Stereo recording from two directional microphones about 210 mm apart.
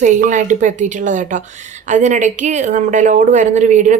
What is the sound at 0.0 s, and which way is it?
A woman's voice, 35° right (ahead or behind).